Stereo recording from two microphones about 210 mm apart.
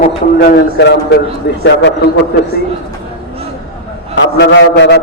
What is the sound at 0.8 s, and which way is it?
Speech, 50° left (ahead or behind).